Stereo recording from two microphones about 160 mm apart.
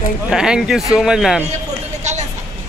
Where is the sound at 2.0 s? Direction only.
45° right (ahead or behind).